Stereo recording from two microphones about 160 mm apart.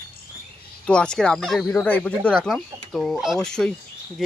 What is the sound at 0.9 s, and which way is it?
Speech, 5° left (ahead or behind).